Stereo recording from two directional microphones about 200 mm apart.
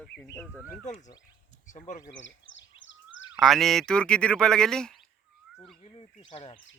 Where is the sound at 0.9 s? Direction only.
35° left (ahead or behind).